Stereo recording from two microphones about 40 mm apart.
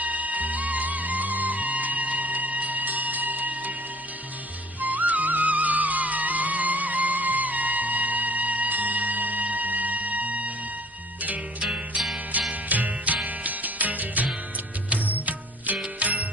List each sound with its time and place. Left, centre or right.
0.0 s music: right
4.8 s music: right
12.6 s music: right